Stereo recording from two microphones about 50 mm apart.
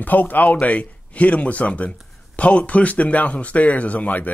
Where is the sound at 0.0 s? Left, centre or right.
Left.